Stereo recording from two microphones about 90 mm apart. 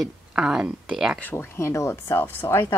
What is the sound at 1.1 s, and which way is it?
Speech, 20° left (ahead or behind).